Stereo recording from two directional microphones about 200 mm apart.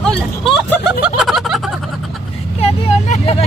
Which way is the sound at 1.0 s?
Centre (ahead or behind).